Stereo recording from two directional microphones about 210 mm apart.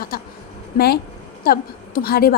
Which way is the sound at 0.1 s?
45° left (ahead or behind).